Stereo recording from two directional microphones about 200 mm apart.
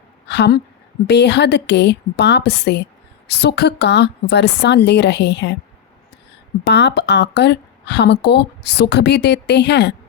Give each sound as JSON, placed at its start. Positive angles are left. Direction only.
{"t": 0.3, "sound": "a woman's voice", "side_deg": 55}
{"t": 6.7, "sound": "a woman's voice", "side_deg": 60}